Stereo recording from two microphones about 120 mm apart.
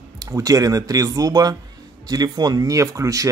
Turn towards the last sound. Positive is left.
turn(degrees=-25)  # may be behind; listen again after turning